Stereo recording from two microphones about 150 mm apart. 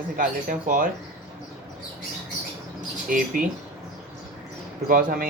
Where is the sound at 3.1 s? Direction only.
65° right (ahead or behind).